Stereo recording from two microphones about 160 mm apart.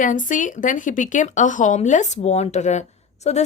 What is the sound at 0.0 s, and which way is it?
A woman's voice, 55° left (ahead or behind).